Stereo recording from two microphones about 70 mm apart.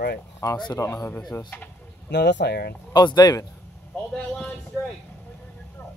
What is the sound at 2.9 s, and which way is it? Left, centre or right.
Speech, left.